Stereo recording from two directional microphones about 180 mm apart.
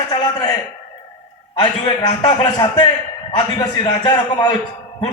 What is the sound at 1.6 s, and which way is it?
A man's voice, 25° left (ahead or behind).